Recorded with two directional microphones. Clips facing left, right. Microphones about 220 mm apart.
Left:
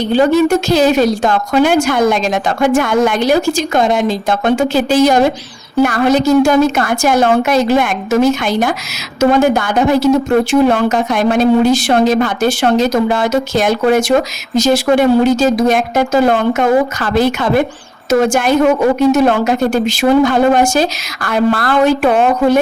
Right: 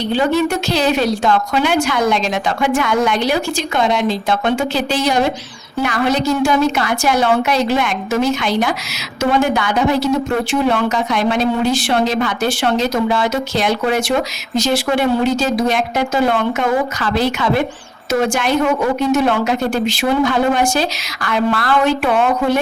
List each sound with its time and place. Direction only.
0.1 s a woman's voice: 45° left (ahead or behind)